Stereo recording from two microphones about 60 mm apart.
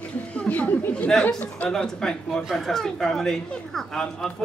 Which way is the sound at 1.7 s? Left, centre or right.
Centre.